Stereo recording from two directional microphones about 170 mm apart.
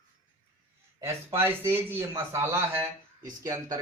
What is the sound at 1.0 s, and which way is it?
A man's voice, 15° right (ahead or behind).